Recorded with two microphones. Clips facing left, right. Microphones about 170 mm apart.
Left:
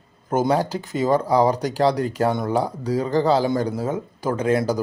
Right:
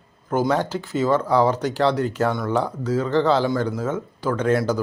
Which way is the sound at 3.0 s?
35° left (ahead or behind).